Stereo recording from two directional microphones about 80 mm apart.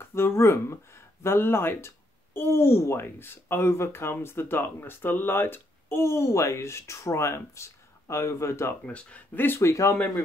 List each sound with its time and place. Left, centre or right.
0.0 s speech: left
8.8 s speech: centre
9.6 s speech: left